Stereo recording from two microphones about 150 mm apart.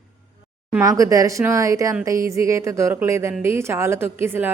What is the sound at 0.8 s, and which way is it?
A woman's voice, 20° right (ahead or behind).